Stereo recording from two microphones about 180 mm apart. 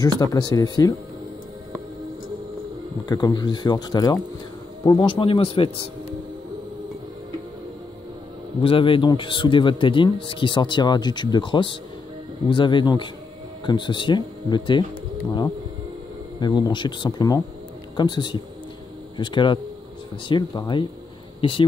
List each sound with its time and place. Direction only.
0.0 s speech: 20° left (ahead or behind)
3.1 s speech: 20° left (ahead or behind)
8.6 s speech: 30° left (ahead or behind)
16.3 s speech: 25° left (ahead or behind)